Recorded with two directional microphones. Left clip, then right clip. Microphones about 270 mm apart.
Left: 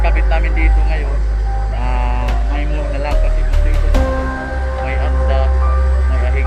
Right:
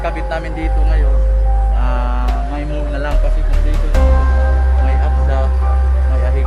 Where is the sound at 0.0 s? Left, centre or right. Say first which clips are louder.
Even; centre.